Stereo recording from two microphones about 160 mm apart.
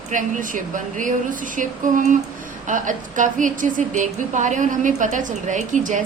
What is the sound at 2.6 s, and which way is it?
A woman's voice, 50° right (ahead or behind).